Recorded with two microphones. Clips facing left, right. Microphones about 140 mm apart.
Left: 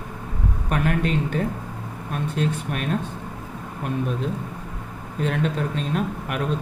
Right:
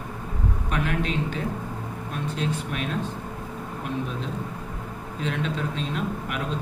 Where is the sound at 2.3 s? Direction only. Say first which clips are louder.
Left 3 dB; 50° left (ahead or behind).